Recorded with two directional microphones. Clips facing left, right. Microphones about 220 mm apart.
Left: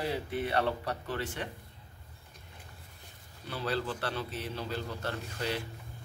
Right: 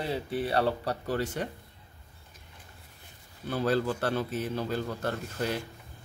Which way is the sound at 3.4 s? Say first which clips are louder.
Right 7 dB; 45° right (ahead or behind).